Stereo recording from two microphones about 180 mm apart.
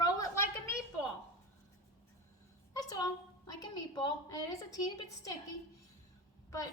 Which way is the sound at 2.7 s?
20° left (ahead or behind).